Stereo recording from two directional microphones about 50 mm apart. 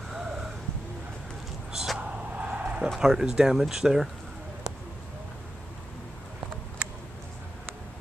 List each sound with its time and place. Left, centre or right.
0.1 s crow: centre
1.7 s a sound: centre
2.0 s vehicle: right
3.0 s speech: centre